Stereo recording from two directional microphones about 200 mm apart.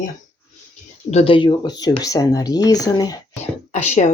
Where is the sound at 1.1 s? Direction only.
30° left (ahead or behind).